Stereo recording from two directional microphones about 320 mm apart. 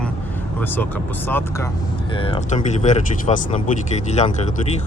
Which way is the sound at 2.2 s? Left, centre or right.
Centre.